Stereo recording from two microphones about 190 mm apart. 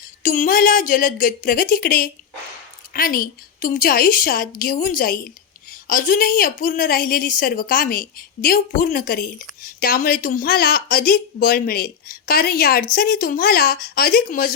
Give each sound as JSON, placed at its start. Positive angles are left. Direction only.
{"t": 0.2, "sound": "a woman's voice", "side_deg": 45}